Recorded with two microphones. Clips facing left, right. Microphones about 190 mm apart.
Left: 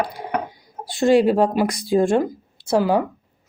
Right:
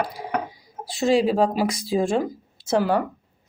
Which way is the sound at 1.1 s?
60° left (ahead or behind).